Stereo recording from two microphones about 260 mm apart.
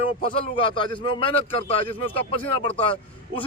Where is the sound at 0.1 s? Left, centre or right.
Centre.